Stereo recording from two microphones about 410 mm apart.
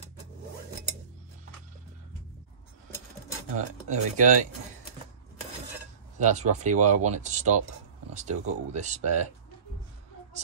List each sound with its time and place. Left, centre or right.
3.5 s speech: centre
6.1 s speech: centre